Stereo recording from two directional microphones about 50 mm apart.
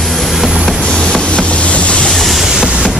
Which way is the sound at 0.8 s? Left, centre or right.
Centre.